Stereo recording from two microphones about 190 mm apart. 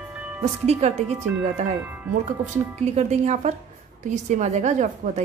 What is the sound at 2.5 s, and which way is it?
A woman's voice, 35° right (ahead or behind).